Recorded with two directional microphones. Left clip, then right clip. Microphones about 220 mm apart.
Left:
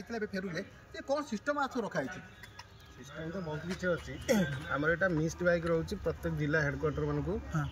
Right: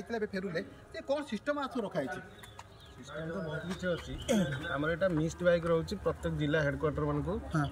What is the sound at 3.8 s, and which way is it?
Speech, 5° left (ahead or behind).